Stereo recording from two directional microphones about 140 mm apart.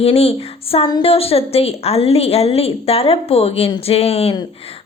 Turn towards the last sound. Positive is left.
turn(degrees=45)  # may be behind; listen again after turning